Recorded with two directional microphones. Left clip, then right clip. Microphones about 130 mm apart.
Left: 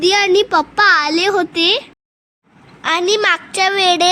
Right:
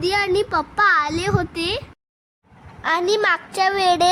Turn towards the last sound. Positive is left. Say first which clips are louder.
# left 4 dB
turn(degrees=15)  # may be behind; listen again after turning